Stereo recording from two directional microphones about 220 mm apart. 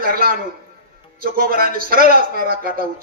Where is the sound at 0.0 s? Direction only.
40° right (ahead or behind).